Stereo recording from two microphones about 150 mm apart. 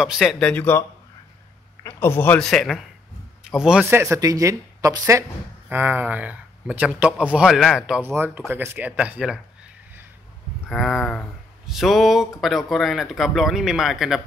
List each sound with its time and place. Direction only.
0.0 s speech: centre (ahead or behind); by 2.4 s 15° left (ahead or behind)
2.4 s speech: 5° left (ahead or behind)
3.8 s speech: 15° right (ahead or behind)
8.0 s speech: 15° right (ahead or behind)
10.7 s speech: centre (ahead or behind)